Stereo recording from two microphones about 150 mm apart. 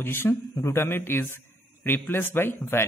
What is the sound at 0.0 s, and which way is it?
A man's voice, 15° left (ahead or behind).